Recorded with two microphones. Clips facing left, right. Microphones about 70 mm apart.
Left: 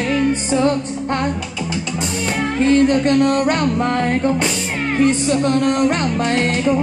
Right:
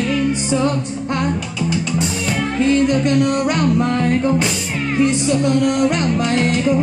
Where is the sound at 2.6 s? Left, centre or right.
Left.